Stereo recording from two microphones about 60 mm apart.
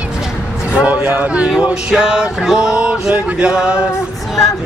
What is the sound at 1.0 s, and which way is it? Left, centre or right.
Speech, right.